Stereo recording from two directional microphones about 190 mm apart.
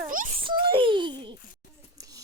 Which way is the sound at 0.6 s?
25° right (ahead or behind).